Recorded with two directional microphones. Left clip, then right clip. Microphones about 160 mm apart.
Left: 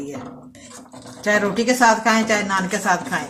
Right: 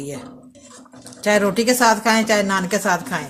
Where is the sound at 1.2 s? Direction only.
85° right.